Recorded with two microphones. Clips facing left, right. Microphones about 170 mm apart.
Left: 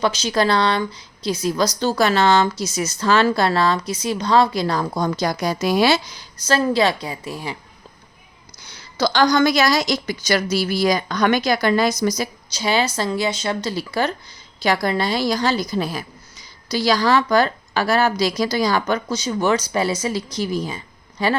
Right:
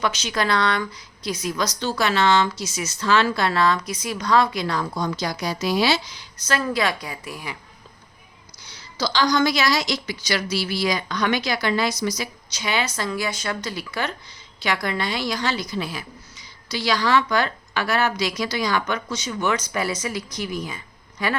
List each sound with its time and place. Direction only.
0.0 s a woman's voice: 35° left (ahead or behind)
6.5 s a woman's voice: 30° left (ahead or behind)
8.6 s a woman's voice: 55° left (ahead or behind); by 21.3 s 30° left (ahead or behind)